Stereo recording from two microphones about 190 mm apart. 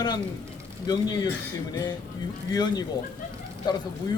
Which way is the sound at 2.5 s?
20° left (ahead or behind).